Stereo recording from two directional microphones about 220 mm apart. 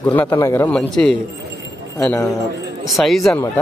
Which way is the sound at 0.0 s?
10° left (ahead or behind).